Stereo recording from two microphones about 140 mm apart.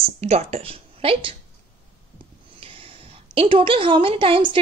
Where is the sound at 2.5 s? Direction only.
40° right (ahead or behind).